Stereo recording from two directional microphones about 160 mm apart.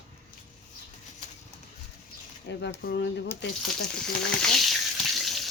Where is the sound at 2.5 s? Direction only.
90° left.